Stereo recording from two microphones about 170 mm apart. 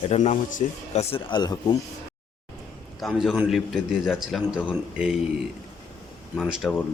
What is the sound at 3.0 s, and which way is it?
A man's voice, centre (ahead or behind).